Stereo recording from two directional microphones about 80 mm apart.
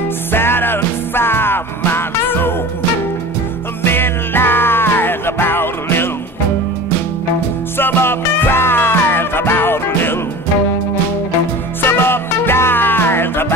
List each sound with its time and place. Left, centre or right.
0.3 s music: left
3.8 s music: left
7.7 s music: left
11.8 s music: left